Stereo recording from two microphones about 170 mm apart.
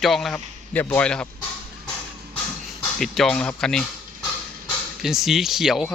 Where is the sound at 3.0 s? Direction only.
Centre (ahead or behind).